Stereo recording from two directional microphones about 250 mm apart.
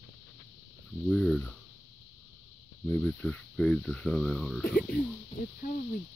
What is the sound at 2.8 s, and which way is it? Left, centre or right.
Speech, centre.